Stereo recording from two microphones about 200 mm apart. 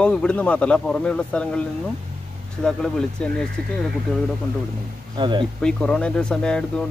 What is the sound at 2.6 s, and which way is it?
Speech, 5° left (ahead or behind).